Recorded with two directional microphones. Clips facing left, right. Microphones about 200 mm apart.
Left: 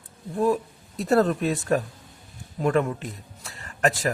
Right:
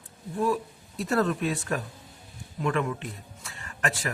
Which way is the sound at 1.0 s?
35° left (ahead or behind).